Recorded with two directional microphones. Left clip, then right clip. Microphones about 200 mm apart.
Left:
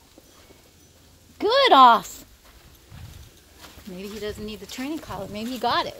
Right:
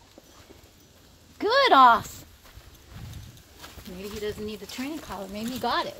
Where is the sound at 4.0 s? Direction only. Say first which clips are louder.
Even; 30° left (ahead or behind).